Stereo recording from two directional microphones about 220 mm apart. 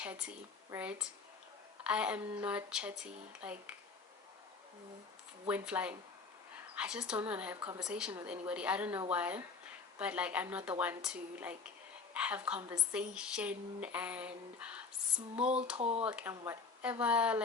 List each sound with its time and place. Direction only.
0.0 s a woman's voice: 5° right (ahead or behind)
5.5 s a woman's voice: 5° right (ahead or behind)
15.8 s speech: 30° right (ahead or behind)
16.0 s a woman's voice: 5° right (ahead or behind)